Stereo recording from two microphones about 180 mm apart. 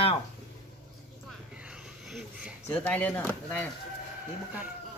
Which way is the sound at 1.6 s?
5° right (ahead or behind).